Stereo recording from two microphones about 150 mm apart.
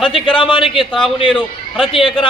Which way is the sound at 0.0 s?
35° left (ahead or behind).